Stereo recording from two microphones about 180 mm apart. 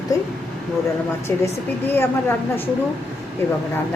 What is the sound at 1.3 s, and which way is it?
Speech, 15° left (ahead or behind).